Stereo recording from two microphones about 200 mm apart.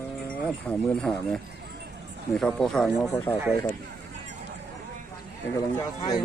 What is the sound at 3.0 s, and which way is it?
Speech, 15° left (ahead or behind).